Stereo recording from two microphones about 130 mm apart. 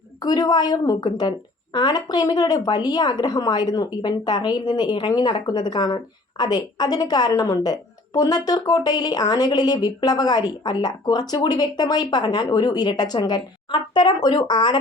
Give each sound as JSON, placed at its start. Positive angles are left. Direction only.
{"t": 0.2, "sound": "speech", "side_deg": 30}